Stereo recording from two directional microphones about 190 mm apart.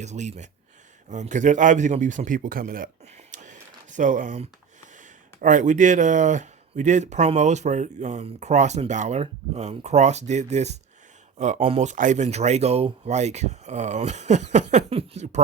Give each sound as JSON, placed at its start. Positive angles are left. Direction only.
{"t": 0.0, "sound": "speech", "side_deg": -35}
{"t": 3.3, "sound": "a sound", "side_deg": -40}
{"t": 4.9, "sound": "speech", "side_deg": -40}